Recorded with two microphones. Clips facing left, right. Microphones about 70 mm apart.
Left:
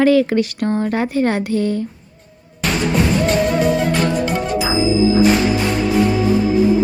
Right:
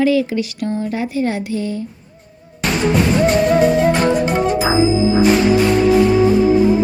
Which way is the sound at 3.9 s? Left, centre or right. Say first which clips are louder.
Right 3 dB; right.